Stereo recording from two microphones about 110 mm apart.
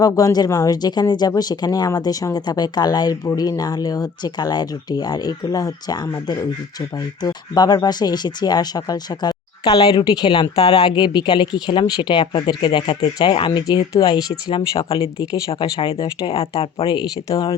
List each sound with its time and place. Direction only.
0.0 s speech: 35° left (ahead or behind)
16.2 s speech: 55° left (ahead or behind)